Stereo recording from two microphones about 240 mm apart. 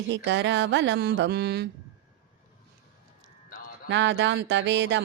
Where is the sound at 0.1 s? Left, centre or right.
Right.